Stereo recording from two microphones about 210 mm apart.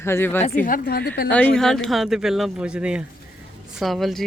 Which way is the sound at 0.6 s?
45° left (ahead or behind).